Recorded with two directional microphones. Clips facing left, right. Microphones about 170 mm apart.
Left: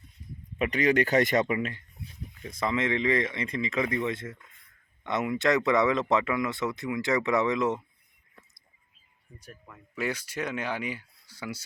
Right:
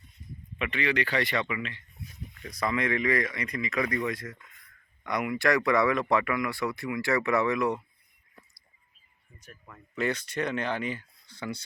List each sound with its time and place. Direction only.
0.6 s speech: 40° left (ahead or behind)
2.4 s speech: 25° left (ahead or behind)
9.6 s speech: 5° left (ahead or behind)